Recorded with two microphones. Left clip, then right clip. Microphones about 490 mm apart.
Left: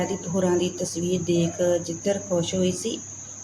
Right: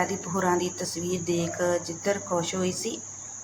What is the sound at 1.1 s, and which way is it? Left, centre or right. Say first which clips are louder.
Speech: left 4 dB; left.